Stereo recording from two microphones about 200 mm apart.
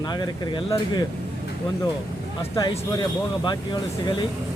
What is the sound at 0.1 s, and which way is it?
Speech, 20° left (ahead or behind).